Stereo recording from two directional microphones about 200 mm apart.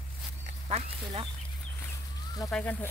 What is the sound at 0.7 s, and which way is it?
Speech, 30° right (ahead or behind).